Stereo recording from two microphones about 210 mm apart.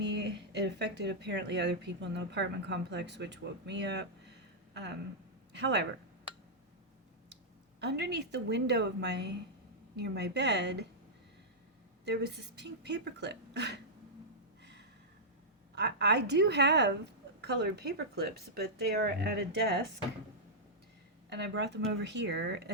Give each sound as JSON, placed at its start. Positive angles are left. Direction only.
{"t": 0.0, "sound": "speech", "side_deg": -55}
{"t": 7.8, "sound": "speech", "side_deg": -55}
{"t": 12.0, "sound": "speech", "side_deg": -50}
{"t": 14.6, "sound": "a sound", "side_deg": -55}
{"t": 15.7, "sound": "speech", "side_deg": -55}
{"t": 21.2, "sound": "speech", "side_deg": -55}